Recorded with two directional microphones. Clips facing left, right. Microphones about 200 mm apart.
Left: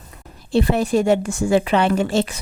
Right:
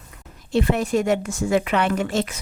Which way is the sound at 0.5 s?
35° left (ahead or behind).